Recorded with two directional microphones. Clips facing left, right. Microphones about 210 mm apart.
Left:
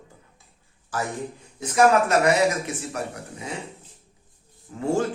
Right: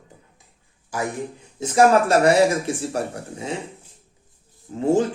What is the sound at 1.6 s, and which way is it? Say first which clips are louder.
Speech: right 2 dB; 30° right (ahead or behind).